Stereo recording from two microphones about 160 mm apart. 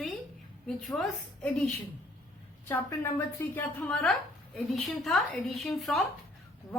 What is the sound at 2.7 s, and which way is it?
A woman's voice, 15° left (ahead or behind).